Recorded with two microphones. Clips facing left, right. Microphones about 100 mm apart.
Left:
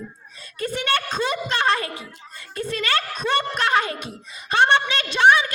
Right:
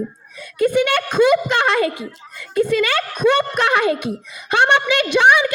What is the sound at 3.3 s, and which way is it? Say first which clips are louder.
A woman's voice: even; 15° right (ahead or behind).